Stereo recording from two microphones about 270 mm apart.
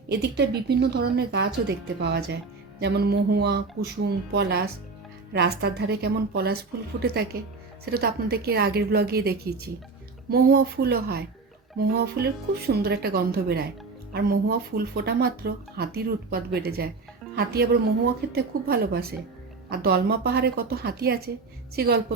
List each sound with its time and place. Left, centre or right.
0.1 s speech: right